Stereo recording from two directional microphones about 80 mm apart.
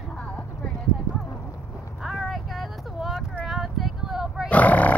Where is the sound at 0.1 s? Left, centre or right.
Centre.